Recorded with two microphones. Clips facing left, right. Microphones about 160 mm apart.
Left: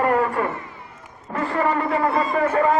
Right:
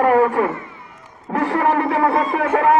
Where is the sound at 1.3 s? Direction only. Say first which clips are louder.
Right 4 dB; 70° right (ahead or behind).